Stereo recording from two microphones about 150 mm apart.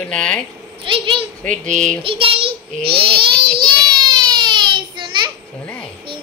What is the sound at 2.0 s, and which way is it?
A child's voice, 35° right (ahead or behind).